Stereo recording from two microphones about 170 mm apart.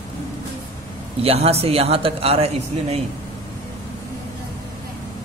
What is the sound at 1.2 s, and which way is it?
A man's voice, 35° right (ahead or behind).